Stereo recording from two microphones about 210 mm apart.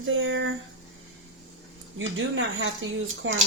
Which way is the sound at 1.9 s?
65° right (ahead or behind).